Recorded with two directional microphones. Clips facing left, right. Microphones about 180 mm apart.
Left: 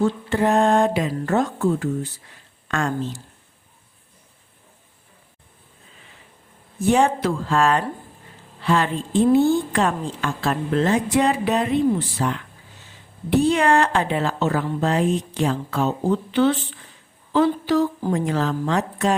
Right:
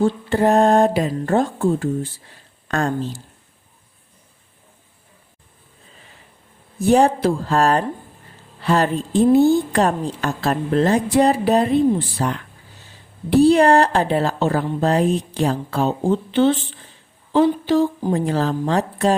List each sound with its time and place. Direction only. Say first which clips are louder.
0.0 s a woman's voice: right 3 dB; 35° right (ahead or behind)
6.7 s a woman's voice: right 3 dB; 35° right (ahead or behind)